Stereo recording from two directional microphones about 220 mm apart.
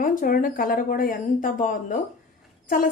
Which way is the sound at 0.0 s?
40° left (ahead or behind).